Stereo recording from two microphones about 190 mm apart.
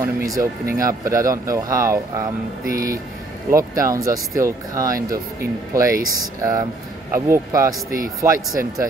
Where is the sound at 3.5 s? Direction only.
15° right (ahead or behind).